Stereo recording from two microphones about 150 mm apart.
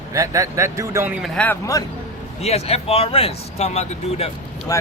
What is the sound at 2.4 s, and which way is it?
Speech, 45° left (ahead or behind).